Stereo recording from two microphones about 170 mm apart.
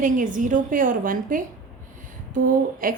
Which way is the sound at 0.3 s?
50° right (ahead or behind).